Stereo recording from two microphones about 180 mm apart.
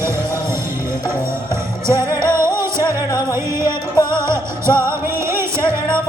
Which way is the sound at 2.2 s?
15° right (ahead or behind).